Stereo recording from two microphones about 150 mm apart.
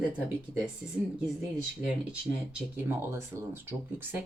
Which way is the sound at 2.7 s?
15° right (ahead or behind).